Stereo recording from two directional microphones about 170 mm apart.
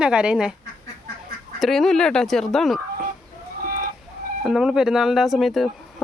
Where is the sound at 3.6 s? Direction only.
55° right (ahead or behind).